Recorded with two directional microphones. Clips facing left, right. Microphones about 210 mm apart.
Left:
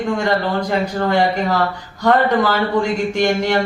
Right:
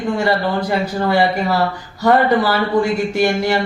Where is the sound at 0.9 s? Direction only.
10° right (ahead or behind).